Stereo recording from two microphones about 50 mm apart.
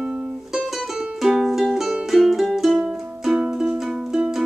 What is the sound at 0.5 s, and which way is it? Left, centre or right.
Music, centre.